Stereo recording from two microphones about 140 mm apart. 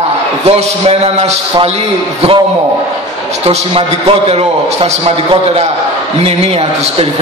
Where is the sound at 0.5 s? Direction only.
50° right (ahead or behind).